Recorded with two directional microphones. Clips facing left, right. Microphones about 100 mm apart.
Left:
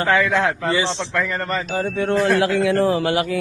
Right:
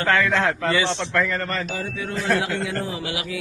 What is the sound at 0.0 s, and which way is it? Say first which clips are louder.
Speech: left 2 dB; 15° left (ahead or behind).